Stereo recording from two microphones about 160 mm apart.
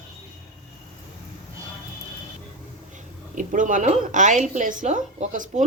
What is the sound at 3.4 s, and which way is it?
A woman's voice, 55° right (ahead or behind).